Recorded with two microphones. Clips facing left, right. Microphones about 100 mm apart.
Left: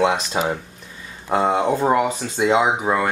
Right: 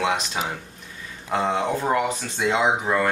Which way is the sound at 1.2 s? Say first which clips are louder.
Left 5 dB; 40° left (ahead or behind).